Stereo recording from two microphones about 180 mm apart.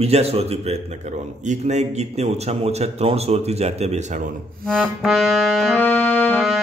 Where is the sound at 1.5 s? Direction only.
40° right (ahead or behind).